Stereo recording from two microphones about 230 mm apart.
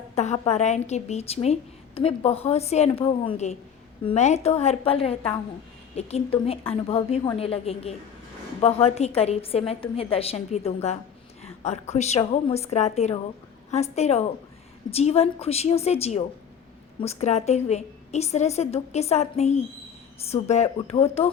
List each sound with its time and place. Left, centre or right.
0.2 s a woman's voice: left